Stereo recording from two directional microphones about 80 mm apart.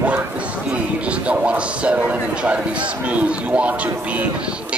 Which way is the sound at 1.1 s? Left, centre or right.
Centre.